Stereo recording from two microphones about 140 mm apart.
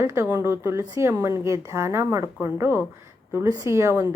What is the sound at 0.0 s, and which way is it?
A woman's voice, 20° right (ahead or behind).